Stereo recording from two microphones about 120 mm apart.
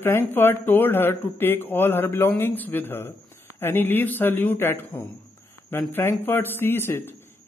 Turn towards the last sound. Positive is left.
turn(degrees=20)  # may be behind; listen again after turning